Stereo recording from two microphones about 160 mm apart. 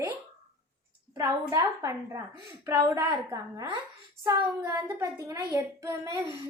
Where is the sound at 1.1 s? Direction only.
20° right (ahead or behind).